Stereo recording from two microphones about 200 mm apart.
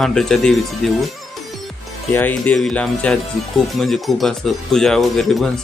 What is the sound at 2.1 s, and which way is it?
Speech, 10° left (ahead or behind).